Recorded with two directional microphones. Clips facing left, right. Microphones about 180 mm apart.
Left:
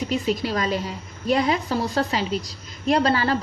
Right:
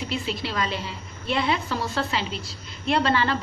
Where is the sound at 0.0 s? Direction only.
40° left (ahead or behind).